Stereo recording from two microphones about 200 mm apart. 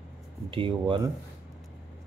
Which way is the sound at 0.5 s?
25° right (ahead or behind).